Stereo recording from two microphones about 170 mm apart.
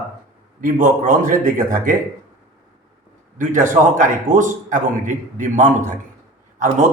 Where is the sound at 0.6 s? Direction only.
50° right (ahead or behind).